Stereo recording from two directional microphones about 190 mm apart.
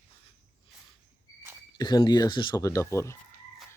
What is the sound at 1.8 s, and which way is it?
Speech, 20° left (ahead or behind).